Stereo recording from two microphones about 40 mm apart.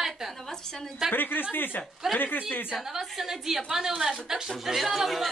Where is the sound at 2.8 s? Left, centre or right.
Centre.